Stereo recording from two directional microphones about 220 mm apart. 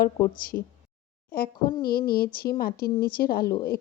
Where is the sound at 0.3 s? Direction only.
40° left (ahead or behind).